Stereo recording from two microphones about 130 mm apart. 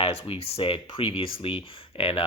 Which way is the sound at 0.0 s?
45° left (ahead or behind).